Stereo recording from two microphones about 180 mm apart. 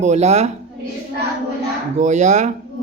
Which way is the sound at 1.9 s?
40° right (ahead or behind).